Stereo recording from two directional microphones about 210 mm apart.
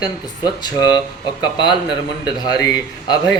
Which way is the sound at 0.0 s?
20° left (ahead or behind).